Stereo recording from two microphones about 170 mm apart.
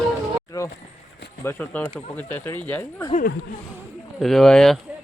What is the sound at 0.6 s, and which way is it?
Speech, 20° left (ahead or behind).